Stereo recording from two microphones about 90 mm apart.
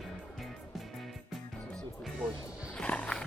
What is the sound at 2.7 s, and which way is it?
Horse, 10° left (ahead or behind).